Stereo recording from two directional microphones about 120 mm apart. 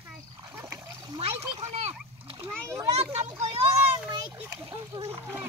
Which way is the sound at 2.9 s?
65° right (ahead or behind).